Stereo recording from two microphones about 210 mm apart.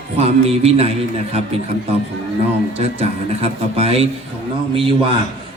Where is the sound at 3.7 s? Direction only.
30° right (ahead or behind).